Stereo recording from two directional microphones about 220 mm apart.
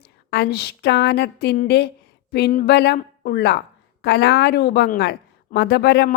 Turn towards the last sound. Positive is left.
turn(degrees=50)  # may be behind; listen again after turning